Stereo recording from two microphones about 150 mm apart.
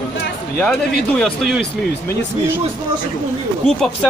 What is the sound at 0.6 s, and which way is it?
Speech, centre (ahead or behind).